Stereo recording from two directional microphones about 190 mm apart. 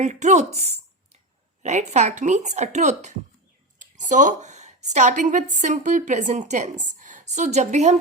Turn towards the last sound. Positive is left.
turn(degrees=-35)  # may be behind; listen again after turning